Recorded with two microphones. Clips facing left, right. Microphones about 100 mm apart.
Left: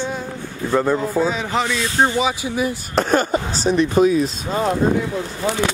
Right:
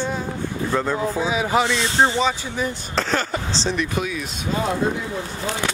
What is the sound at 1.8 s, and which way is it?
Speech, 25° right (ahead or behind).